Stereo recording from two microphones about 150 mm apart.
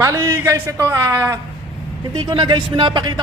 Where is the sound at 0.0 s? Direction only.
20° right (ahead or behind).